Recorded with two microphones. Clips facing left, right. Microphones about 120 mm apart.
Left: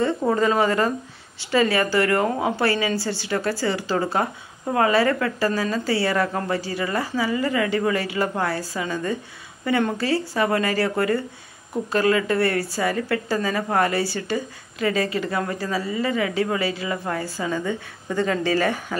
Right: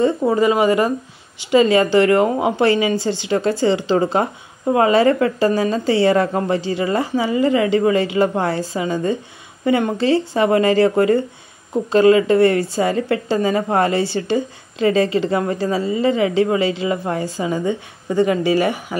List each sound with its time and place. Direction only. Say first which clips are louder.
0.2 s speech: right 4 dB; 10° right (ahead or behind)